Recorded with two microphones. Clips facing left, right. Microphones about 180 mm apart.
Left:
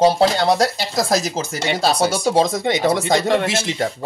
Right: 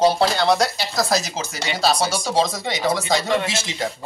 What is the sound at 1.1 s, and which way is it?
Speech, 50° left (ahead or behind).